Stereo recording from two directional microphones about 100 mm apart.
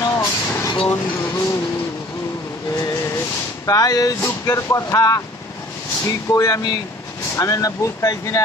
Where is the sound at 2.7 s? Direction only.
35° left (ahead or behind).